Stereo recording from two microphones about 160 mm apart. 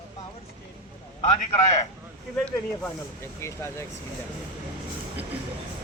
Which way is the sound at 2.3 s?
10° left (ahead or behind).